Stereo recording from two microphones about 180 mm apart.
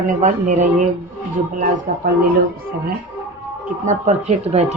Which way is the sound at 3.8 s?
40° right (ahead or behind).